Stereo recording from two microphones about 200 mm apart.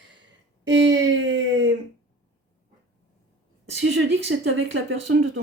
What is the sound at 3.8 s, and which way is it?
Speech, 60° right (ahead or behind).